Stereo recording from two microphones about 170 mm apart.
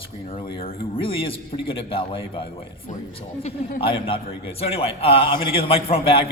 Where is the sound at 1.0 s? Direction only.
30° left (ahead or behind).